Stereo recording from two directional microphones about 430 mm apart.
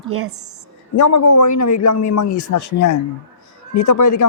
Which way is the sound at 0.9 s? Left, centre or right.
Left.